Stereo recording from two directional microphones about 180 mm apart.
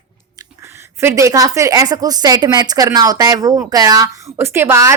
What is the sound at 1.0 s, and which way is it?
Speech, 15° right (ahead or behind).